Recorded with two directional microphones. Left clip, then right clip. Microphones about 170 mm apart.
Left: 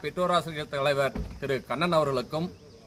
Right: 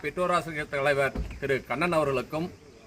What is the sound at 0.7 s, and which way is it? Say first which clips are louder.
Speech: right 1 dB; 20° right (ahead or behind).